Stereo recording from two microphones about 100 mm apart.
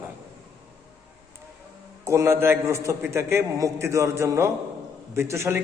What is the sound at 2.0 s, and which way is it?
A man's voice, 25° right (ahead or behind).